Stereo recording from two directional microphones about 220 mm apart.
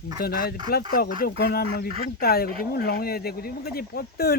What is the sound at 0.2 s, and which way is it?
Speech, 45° left (ahead or behind).